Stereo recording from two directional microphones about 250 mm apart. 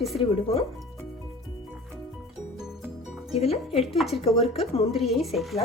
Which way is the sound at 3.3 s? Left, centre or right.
Left.